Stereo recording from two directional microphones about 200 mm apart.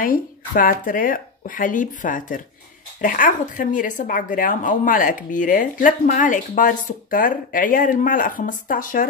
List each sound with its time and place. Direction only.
0.0 s a woman's voice: 45° left (ahead or behind)